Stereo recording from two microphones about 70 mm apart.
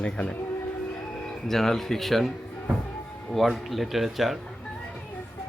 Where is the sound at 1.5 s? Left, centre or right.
Centre.